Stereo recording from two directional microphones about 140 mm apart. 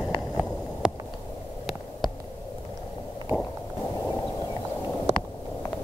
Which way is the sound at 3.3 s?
10° right (ahead or behind).